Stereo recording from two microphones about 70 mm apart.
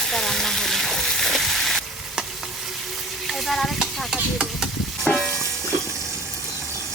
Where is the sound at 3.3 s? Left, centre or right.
Centre.